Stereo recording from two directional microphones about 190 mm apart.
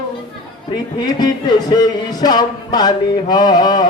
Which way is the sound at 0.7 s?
20° left (ahead or behind).